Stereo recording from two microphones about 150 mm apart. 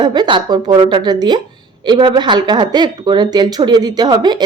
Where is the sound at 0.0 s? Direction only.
30° right (ahead or behind).